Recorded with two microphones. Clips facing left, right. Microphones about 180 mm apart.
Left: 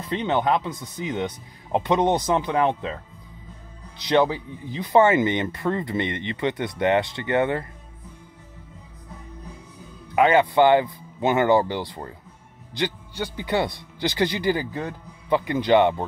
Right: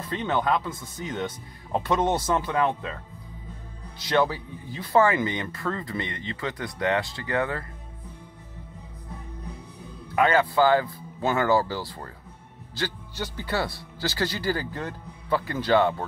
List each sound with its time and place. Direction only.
0.1 s a man's voice: 20° left (ahead or behind)
4.0 s speech: 20° left (ahead or behind)
10.1 s a man's voice: 20° left (ahead or behind)